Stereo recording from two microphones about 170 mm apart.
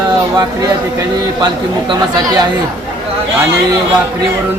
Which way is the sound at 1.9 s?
25° right (ahead or behind).